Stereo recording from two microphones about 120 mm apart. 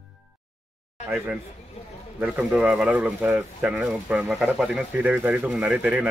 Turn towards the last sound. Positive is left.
turn(degrees=-10)  # may be behind; listen again after turning